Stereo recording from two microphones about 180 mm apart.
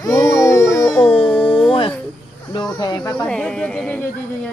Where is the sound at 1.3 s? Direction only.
5° left (ahead or behind).